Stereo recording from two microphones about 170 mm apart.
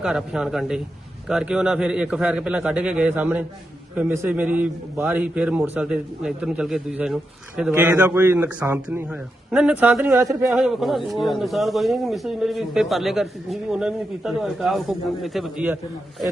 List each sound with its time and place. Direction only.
0.0 s a man's voice: 5° right (ahead or behind)
10.5 s a man's voice: centre (ahead or behind)